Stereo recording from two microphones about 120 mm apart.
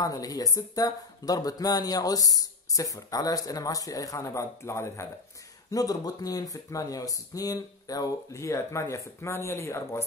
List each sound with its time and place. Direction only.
0.0 s speech: 30° left (ahead or behind)